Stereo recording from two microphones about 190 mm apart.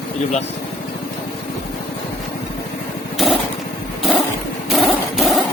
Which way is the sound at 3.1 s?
Centre (ahead or behind).